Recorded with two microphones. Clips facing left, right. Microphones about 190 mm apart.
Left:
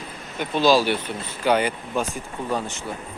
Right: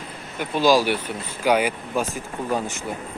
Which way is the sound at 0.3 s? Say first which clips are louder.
Even; 10° right (ahead or behind).